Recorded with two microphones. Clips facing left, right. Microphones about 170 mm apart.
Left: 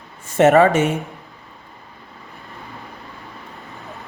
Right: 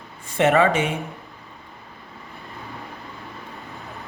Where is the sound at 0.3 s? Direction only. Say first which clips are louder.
Left 5 dB; 45° left (ahead or behind).